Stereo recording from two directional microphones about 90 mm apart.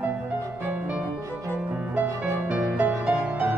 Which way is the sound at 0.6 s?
15° right (ahead or behind).